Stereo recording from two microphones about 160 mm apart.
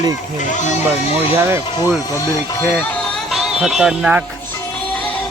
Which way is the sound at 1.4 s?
15° right (ahead or behind).